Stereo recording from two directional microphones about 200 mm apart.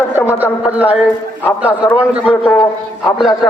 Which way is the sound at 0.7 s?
5° right (ahead or behind).